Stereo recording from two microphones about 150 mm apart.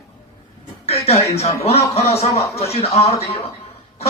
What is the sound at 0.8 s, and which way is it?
A man's voice, 45° left (ahead or behind).